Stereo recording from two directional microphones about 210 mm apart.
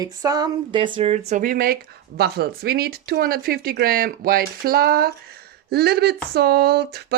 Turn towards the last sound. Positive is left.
turn(degrees=-50)  # may be behind; listen again after turning